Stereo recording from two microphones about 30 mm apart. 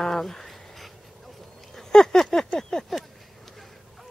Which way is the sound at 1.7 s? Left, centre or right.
Left.